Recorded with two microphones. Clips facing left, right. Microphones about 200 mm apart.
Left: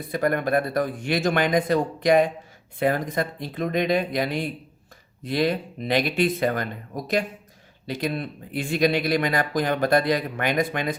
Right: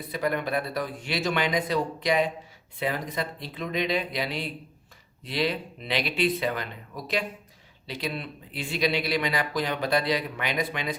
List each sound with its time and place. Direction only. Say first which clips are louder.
0.1 s speech: left 5 dB; 50° left (ahead or behind)